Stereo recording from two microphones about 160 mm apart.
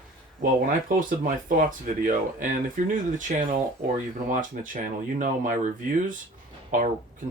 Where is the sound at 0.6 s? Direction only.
60° right (ahead or behind).